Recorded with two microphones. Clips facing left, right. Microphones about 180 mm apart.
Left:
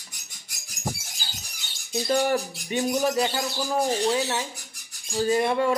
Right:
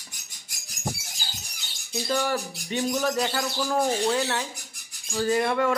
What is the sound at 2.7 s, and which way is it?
Speech, 10° left (ahead or behind).